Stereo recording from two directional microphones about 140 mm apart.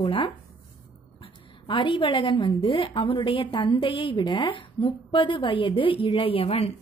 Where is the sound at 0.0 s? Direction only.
35° left (ahead or behind).